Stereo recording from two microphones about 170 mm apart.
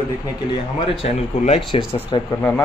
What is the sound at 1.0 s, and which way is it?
Speech, 35° left (ahead or behind).